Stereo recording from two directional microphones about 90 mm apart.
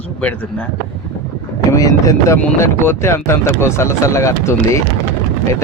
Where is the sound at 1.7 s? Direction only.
40° left (ahead or behind).